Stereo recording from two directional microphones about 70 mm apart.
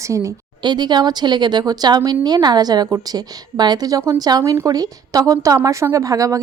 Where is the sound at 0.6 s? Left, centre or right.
Right.